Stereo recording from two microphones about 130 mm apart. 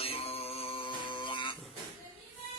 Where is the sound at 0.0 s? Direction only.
50° left (ahead or behind).